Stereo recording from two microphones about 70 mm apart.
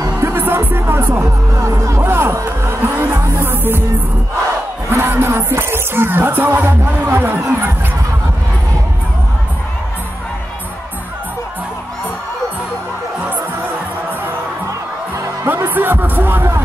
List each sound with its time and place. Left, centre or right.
0.2 s music: right
2.0 s music: right
4.8 s music: right
15.4 s music: right